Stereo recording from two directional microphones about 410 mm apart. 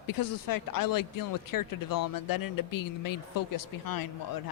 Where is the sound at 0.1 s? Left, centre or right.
Left.